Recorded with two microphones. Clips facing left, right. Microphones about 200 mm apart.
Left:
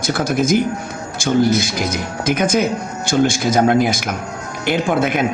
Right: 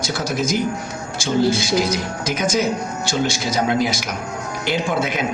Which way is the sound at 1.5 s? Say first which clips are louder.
Right 1 dB; 55° left (ahead or behind).